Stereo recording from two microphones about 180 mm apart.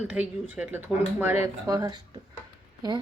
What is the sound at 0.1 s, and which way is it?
Speech, 10° right (ahead or behind).